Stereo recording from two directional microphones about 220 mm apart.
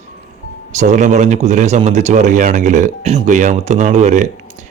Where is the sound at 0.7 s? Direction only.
30° right (ahead or behind).